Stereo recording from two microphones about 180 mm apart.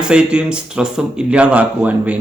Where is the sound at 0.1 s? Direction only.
5° right (ahead or behind).